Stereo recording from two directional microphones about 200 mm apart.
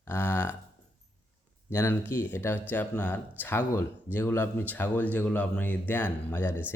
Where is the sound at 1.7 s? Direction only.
10° left (ahead or behind).